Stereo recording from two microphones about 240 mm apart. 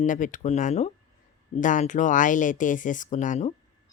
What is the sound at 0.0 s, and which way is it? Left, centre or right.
Speech, left.